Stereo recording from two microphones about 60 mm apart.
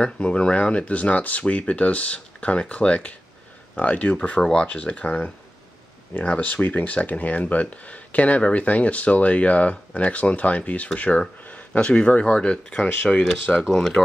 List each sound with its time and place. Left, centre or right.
0.0 s speech: centre
4.4 s speech: centre; by 13.2 s left
13.6 s speech: centre